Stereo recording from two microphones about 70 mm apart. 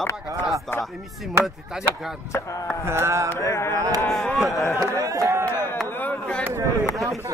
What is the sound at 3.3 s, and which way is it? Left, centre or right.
Music, left.